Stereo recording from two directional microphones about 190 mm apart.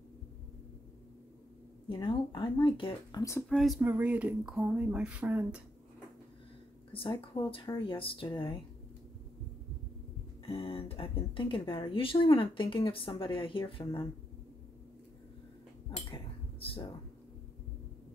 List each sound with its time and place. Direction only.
2.0 s speech: 25° left (ahead or behind)
3.4 s speech: centre (ahead or behind)
6.9 s speech: 25° left (ahead or behind)
10.4 s speech: 30° left (ahead or behind)
15.9 s cutlery: 25° left (ahead or behind)
16.5 s a sound: 30° left (ahead or behind)